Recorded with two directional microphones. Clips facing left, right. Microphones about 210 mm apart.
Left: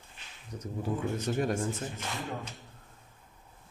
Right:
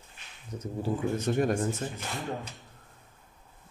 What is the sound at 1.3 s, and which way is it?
Speech, 50° right (ahead or behind).